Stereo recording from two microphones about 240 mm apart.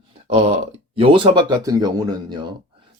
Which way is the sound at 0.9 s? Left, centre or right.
Right.